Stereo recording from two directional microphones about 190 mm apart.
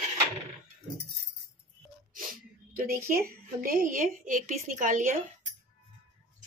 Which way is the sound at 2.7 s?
50° right (ahead or behind).